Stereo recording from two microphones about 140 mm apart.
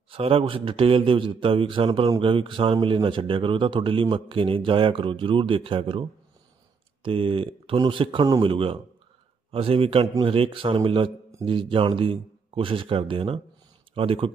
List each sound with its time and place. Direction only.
0.1 s a man's voice: 40° right (ahead or behind)